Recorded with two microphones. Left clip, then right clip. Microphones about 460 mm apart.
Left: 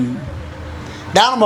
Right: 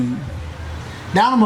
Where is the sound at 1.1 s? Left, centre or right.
Left.